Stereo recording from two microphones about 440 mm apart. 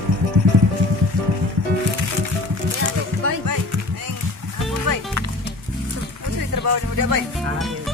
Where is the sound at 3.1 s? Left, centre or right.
Right.